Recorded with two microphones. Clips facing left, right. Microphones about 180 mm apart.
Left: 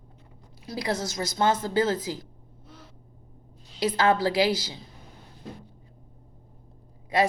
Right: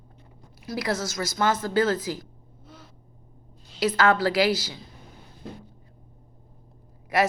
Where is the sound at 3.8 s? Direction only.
15° left (ahead or behind).